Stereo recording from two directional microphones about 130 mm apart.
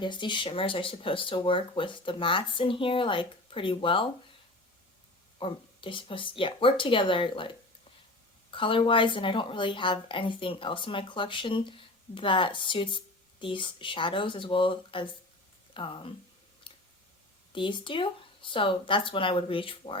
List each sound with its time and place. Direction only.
0.0 s a woman's voice: 35° left (ahead or behind)
5.4 s a woman's voice: 40° left (ahead or behind)
16.7 s a sound: 40° left (ahead or behind)
17.5 s a woman's voice: 40° left (ahead or behind)